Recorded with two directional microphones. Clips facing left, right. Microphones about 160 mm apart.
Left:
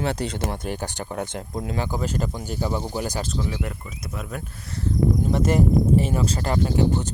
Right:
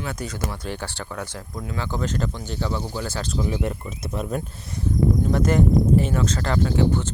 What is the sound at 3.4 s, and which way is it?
Speech, 20° right (ahead or behind).